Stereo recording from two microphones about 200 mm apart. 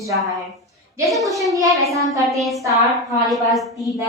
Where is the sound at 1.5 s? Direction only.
15° right (ahead or behind).